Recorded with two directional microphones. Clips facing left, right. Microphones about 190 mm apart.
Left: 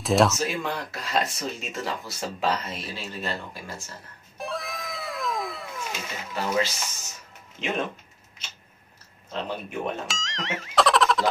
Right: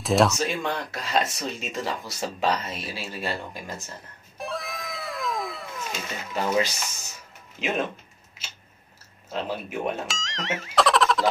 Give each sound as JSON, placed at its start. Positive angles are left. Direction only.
{"t": 0.0, "sound": "speech", "side_deg": 0}
{"t": 4.4, "sound": "cat", "side_deg": 0}
{"t": 6.3, "sound": "speech", "side_deg": -15}
{"t": 8.4, "sound": "a sound", "side_deg": -5}
{"t": 9.3, "sound": "speech", "side_deg": -5}